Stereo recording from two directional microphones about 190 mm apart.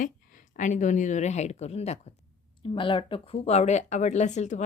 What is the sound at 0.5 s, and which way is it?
Speech, 40° left (ahead or behind).